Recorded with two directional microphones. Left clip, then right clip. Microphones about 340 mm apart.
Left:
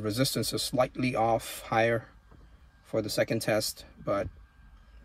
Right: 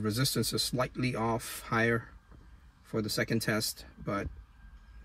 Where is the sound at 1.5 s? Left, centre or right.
Left.